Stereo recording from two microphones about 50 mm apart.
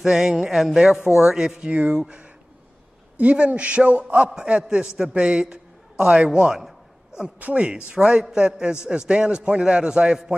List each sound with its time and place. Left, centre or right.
0.0 s a man's voice: centre